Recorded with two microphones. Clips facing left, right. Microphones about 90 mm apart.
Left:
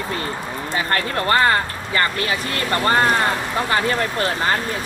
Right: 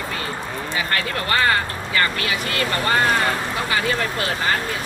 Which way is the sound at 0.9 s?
35° left (ahead or behind).